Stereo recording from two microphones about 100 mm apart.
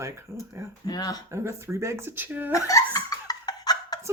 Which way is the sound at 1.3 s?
30° right (ahead or behind).